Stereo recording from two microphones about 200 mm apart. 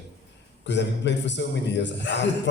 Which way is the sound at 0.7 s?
60° left (ahead or behind).